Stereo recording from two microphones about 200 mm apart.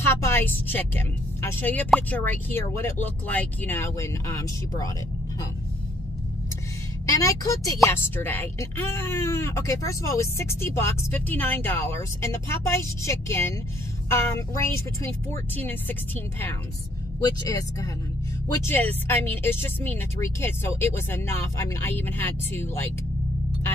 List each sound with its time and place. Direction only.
0.0 s a woman's voice: 10° left (ahead or behind)
7.2 s a woman's voice: 15° left (ahead or behind)